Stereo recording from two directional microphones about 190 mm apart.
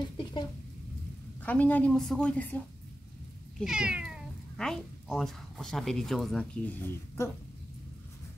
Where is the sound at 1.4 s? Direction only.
10° left (ahead or behind).